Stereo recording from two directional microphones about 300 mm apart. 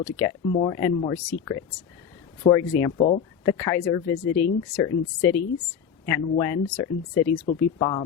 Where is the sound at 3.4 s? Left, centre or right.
Centre.